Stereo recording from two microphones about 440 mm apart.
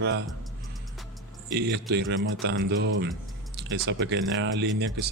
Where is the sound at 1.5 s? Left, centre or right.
Right.